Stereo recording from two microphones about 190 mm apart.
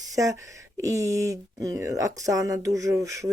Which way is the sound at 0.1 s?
15° right (ahead or behind).